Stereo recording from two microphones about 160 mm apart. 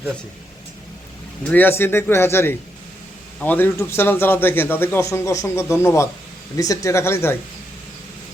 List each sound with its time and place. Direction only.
1.5 s a man's voice: 10° left (ahead or behind)